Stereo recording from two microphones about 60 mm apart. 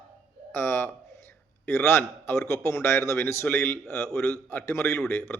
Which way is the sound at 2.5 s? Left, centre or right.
Left.